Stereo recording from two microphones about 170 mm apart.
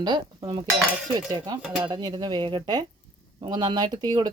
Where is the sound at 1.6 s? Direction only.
5° right (ahead or behind).